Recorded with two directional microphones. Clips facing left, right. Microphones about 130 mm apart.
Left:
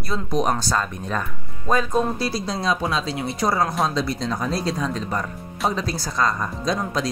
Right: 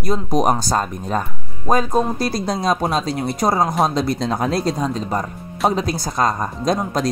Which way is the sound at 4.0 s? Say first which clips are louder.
Right 4 dB; 55° right (ahead or behind).